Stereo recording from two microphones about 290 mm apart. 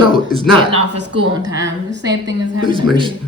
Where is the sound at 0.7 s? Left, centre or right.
Right.